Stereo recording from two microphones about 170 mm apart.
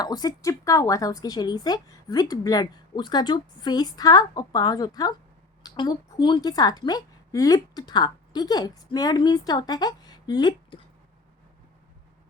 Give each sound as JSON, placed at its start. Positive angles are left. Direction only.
{"t": 0.0, "sound": "speech", "side_deg": 25}